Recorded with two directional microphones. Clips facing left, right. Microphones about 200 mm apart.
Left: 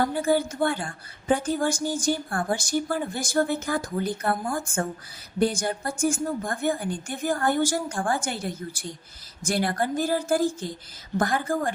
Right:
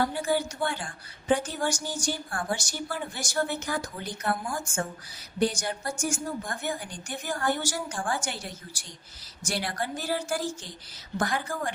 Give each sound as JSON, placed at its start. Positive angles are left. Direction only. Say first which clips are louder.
{"t": 0.1, "sound": "a woman's voice", "louder": "left 4 dB", "side_deg": 50}